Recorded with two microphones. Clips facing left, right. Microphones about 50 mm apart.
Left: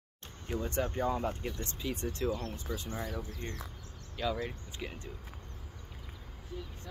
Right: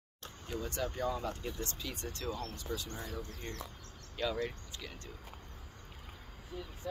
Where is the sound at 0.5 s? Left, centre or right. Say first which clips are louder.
Left 4 dB; left.